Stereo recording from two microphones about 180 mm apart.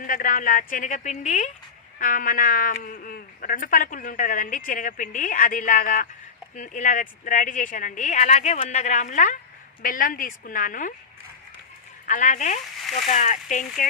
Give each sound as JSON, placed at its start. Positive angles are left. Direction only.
{"t": 0.0, "sound": "speech", "side_deg": 50}
{"t": 12.0, "sound": "speech", "side_deg": 45}